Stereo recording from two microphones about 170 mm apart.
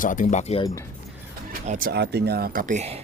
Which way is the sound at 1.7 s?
55° right (ahead or behind).